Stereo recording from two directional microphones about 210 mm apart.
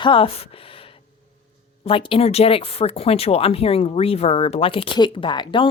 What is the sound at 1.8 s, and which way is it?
Speech, 25° left (ahead or behind).